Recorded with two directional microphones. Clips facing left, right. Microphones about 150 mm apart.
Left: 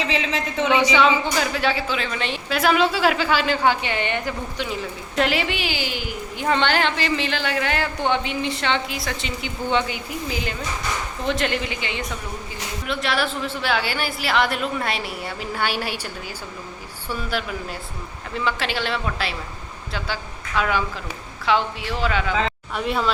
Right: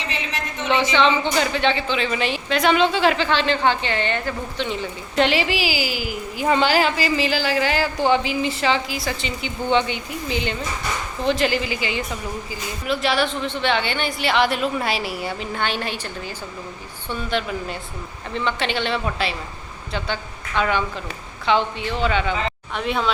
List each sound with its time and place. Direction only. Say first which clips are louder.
0.1 s a sound: left 5 dB; 90° left
0.7 s a woman's voice: even; 10° left (ahead or behind)
17.1 s a woman's voice: right 2 dB; 5° left (ahead or behind)
20.6 s a woman's voice: right 1 dB; 5° left (ahead or behind)